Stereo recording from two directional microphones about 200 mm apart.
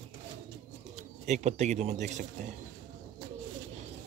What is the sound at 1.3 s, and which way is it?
Speech, 35° right (ahead or behind).